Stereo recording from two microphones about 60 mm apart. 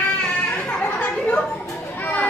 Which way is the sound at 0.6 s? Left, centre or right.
Centre.